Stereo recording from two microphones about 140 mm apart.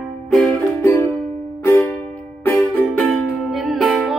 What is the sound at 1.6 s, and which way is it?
Music, 20° left (ahead or behind).